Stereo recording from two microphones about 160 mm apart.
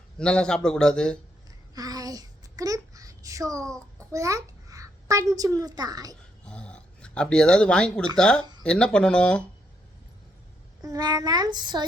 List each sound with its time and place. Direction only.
0.2 s a man's voice: 5° left (ahead or behind)
1.5 s a sound: 25° right (ahead or behind)
4.1 s a child's voice: 20° right (ahead or behind)
6.4 s a man's voice: 5° left (ahead or behind)
10.8 s a child's voice: 25° right (ahead or behind)